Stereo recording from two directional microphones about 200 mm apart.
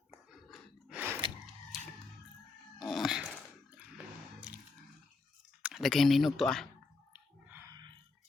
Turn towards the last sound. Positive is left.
turn(degrees=-10)  # may be behind; listen again after turning